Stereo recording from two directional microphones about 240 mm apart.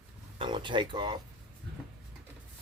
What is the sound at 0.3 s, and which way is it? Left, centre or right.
Speech, centre.